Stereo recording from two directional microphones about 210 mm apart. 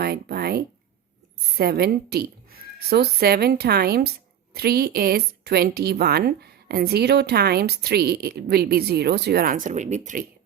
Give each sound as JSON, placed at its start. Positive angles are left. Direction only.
{"t": 0.0, "sound": "speech", "side_deg": -50}